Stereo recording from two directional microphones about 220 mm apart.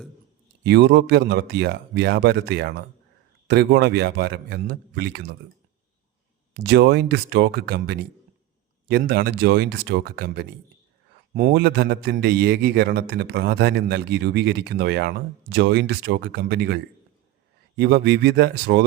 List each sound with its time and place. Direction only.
0.6 s a man's voice: 50° right (ahead or behind)
6.5 s a man's voice: 50° right (ahead or behind)